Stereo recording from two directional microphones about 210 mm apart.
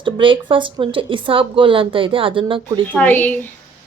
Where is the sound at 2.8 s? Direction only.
10° left (ahead or behind).